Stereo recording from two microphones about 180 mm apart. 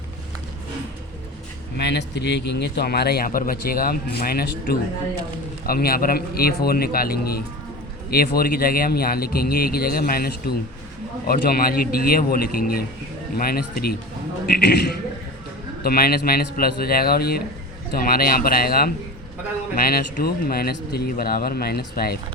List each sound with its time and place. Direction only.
1.8 s a man's voice: 70° left (ahead or behind)